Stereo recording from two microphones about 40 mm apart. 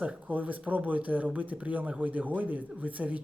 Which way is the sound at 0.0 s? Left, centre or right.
Right.